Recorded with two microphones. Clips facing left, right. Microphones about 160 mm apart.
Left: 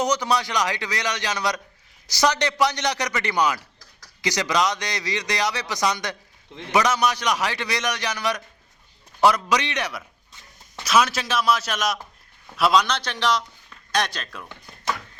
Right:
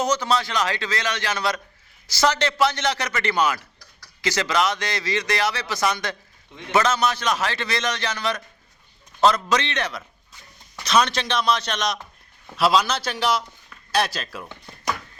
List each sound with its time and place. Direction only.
0.0 s a man's voice: 15° left (ahead or behind); by 14.4 s 5° right (ahead or behind)